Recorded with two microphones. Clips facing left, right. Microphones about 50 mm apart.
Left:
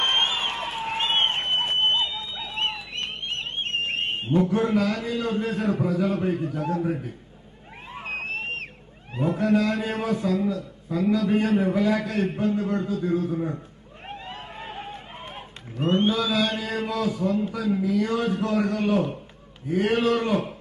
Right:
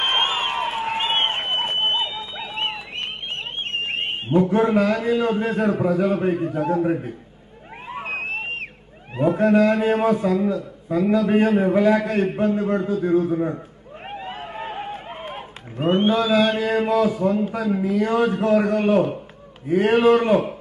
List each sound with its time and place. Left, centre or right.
0.0 s crowd: centre
0.9 s a sound: centre
4.5 s a man's voice: right
7.9 s vehicle: centre
9.1 s cat: centre
9.4 s a man's voice: right
14.0 s vehicle: centre
15.0 s run: centre
15.8 s mantra: centre
16.6 s a man's voice: right
19.7 s a man's voice: right